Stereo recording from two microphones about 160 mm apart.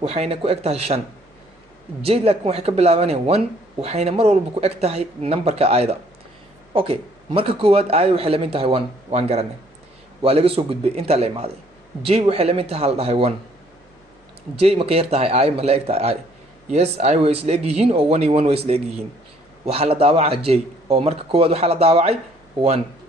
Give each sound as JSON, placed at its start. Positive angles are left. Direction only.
{"t": 0.0, "sound": "speech", "side_deg": -40}
{"t": 14.5, "sound": "speech", "side_deg": -35}